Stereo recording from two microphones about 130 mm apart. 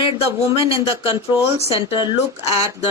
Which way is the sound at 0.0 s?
45° left (ahead or behind).